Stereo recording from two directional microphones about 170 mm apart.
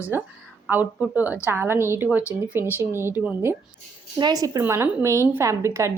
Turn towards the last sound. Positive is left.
turn(degrees=-15)  # may be behind; listen again after turning